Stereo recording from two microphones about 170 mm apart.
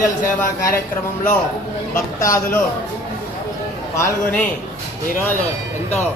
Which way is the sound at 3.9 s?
15° left (ahead or behind).